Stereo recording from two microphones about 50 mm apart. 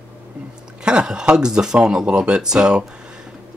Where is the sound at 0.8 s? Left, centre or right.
Centre.